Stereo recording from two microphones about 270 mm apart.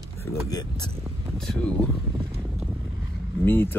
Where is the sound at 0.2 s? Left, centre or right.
Centre.